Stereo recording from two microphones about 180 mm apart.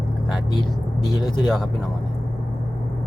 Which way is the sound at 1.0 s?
25° left (ahead or behind).